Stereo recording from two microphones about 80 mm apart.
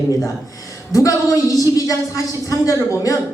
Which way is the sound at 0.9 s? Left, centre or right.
Left.